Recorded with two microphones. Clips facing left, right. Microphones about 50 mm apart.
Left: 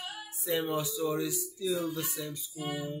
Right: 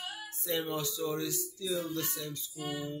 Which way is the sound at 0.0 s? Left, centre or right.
Centre.